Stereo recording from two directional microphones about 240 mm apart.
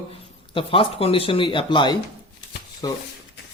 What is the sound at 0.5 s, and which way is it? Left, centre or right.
Speech, left.